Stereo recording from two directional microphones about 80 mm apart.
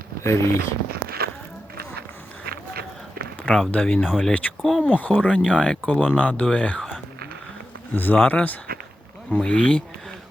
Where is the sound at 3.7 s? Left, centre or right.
Centre.